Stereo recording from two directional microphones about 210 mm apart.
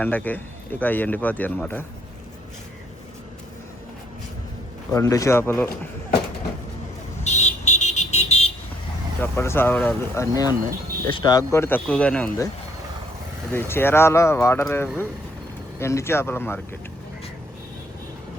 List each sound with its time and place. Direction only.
0.0 s speech: 10° left (ahead or behind)
4.9 s speech: 15° left (ahead or behind)
7.3 s vehicle: 35° left (ahead or behind)
9.2 s speech: 10° left (ahead or behind)
13.5 s speech: 10° left (ahead or behind)